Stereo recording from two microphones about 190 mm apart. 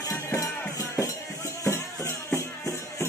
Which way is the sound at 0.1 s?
15° left (ahead or behind).